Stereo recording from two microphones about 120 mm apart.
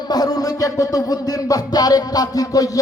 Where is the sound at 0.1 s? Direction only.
30° left (ahead or behind).